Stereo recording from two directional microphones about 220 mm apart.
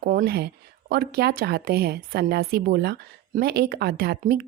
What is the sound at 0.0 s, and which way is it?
Speech, 40° right (ahead or behind).